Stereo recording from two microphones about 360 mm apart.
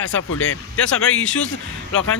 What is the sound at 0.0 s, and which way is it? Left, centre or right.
Speech, left.